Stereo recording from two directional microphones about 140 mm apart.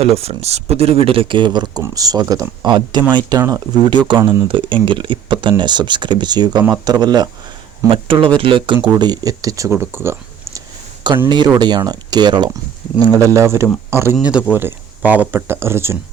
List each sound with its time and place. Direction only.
0.0 s speech: 45° right (ahead or behind); by 10.6 s 20° right (ahead or behind)
11.3 s speech: 30° right (ahead or behind)
13.2 s speech: 20° right (ahead or behind)
14.2 s speech: 10° right (ahead or behind)